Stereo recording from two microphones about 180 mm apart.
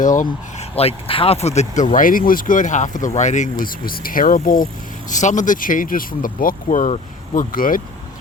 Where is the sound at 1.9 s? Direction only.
50° left (ahead or behind).